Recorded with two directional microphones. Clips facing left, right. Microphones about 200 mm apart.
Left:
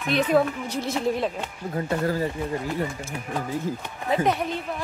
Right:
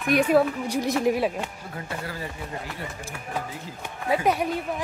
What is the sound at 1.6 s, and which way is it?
Speech, 40° left (ahead or behind).